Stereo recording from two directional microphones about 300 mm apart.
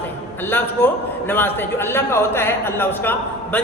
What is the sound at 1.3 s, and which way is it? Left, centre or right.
A man's voice, centre.